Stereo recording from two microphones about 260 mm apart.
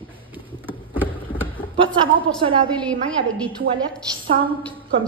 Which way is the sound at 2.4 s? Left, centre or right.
Centre.